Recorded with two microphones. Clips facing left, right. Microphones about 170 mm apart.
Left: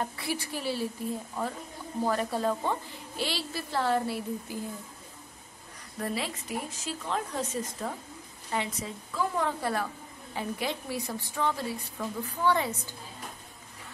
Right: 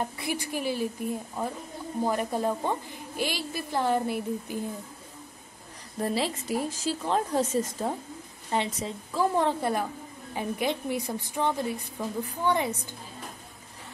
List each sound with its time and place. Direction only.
0.2 s a woman's voice: 15° right (ahead or behind)
2.0 s a woman's voice: 15° right (ahead or behind)
5.9 s a woman's voice: 30° right (ahead or behind)